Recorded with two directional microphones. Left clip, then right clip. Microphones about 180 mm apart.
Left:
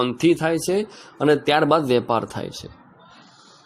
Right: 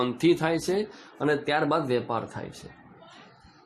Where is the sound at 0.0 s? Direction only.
25° left (ahead or behind).